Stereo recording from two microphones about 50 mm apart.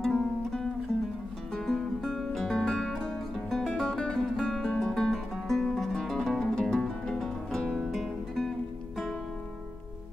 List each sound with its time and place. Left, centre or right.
0.0 s music: centre
1.7 s music: centre
5.0 s music: centre
7.9 s guitar: centre